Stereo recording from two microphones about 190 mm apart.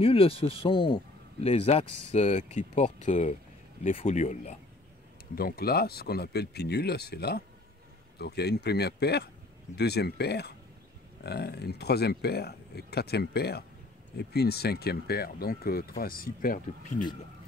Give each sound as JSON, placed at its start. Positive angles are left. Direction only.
{"t": 0.0, "sound": "speech", "side_deg": 30}
{"t": 5.3, "sound": "speech", "side_deg": 55}